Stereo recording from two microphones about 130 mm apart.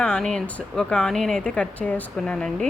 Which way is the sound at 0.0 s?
5° left (ahead or behind).